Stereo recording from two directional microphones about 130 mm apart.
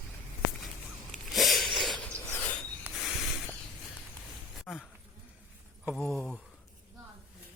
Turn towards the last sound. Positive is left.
turn(degrees=5)  # may be behind; listen again after turning